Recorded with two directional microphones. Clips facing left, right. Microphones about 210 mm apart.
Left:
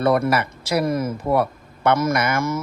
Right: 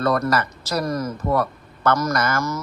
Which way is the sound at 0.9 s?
25° left (ahead or behind).